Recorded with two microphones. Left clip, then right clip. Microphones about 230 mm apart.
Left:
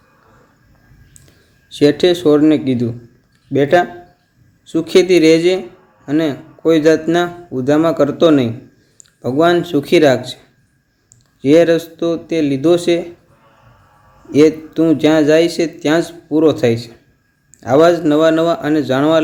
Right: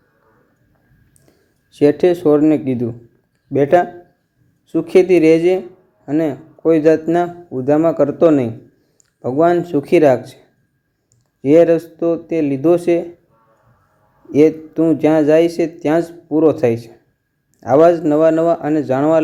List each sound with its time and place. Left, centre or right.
1.7 s a man's voice: centre
11.3 s a man's voice: centre
14.3 s a man's voice: centre